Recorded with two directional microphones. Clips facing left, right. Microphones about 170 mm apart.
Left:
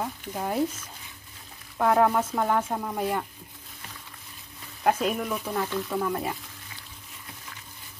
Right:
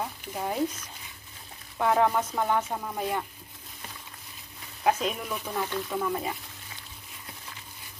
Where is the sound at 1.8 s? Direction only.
Centre (ahead or behind).